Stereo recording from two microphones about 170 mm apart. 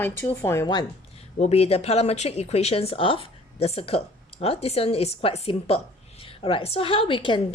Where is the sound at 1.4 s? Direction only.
35° left (ahead or behind).